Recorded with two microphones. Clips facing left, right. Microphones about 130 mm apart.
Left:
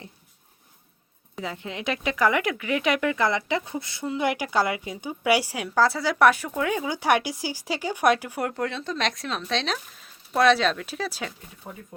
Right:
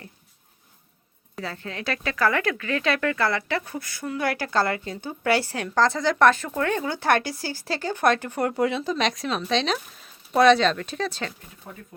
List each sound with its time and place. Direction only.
1.4 s speech: 15° left (ahead or behind)
8.5 s speech: 5° right (ahead or behind); by 11.8 s 15° left (ahead or behind)